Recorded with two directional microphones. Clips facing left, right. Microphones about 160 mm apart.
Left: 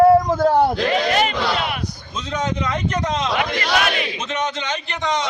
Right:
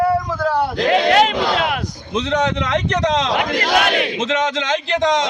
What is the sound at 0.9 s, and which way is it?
A man's voice, 90° right.